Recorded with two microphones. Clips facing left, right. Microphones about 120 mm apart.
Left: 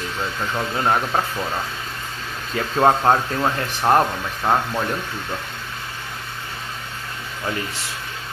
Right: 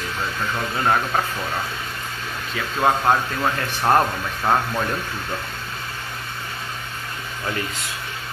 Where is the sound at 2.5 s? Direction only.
30° left (ahead or behind).